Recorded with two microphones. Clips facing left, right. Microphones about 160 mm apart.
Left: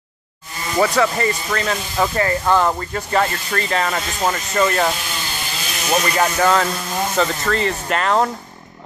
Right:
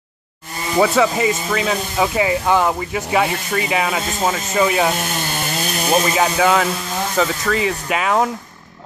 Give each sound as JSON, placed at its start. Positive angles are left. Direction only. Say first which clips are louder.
{"t": 0.7, "sound": "speech", "louder": "right 2 dB", "side_deg": -5}
{"t": 4.9, "sound": "chainsaw", "louder": "right 5 dB", "side_deg": -50}
{"t": 6.0, "sound": "speech", "louder": "right 1 dB", "side_deg": -5}